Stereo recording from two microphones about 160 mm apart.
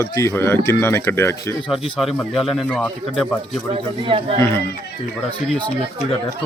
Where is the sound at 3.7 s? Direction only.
35° right (ahead or behind).